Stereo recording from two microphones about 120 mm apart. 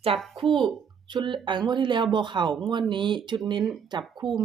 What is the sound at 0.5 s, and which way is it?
A woman's voice, 40° right (ahead or behind).